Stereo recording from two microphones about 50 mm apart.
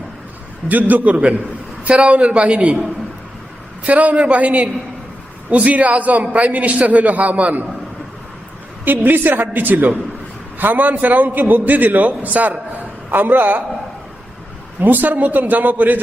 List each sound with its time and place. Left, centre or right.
0.7 s a man's voice: right
3.8 s a man's voice: right
8.8 s a man's voice: right
14.8 s a man's voice: right